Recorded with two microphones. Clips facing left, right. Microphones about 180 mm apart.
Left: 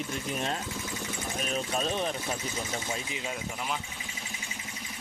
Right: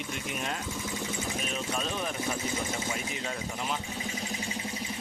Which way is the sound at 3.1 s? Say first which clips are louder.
Even; 15° left (ahead or behind).